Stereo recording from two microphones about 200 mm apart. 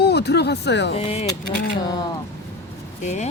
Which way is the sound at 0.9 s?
30° left (ahead or behind).